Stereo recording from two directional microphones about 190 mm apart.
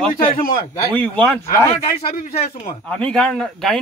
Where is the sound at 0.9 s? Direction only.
5° left (ahead or behind).